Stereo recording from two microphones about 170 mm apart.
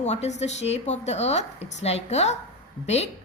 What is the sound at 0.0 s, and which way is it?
A woman's voice, 40° left (ahead or behind).